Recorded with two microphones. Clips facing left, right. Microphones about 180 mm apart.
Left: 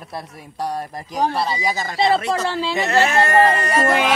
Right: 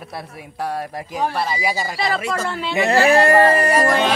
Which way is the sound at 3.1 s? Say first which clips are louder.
Right 4 dB; 35° right (ahead or behind).